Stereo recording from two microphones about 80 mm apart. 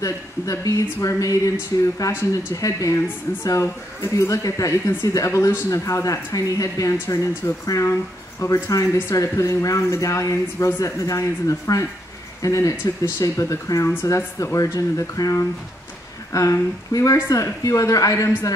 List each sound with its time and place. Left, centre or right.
0.0 s speech: left